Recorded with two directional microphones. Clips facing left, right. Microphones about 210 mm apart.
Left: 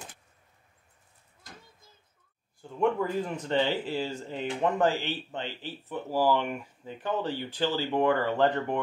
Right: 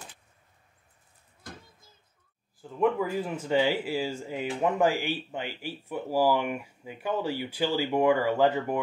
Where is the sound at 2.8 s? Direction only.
5° right (ahead or behind).